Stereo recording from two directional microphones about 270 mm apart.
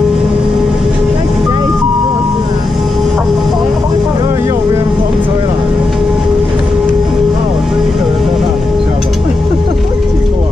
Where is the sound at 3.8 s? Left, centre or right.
Centre.